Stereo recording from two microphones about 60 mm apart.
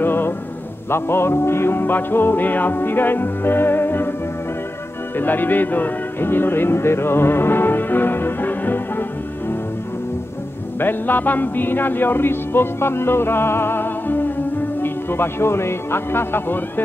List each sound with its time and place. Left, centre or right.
0.0 s music: left
0.8 s speech: left
5.2 s speech: left
10.8 s speech: left